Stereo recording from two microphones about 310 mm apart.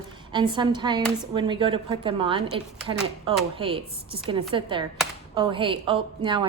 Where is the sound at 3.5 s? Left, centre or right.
Centre.